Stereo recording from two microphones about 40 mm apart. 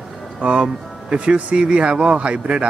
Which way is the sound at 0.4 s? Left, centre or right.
Right.